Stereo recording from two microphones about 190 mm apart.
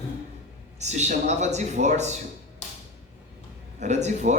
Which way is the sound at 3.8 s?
35° right (ahead or behind).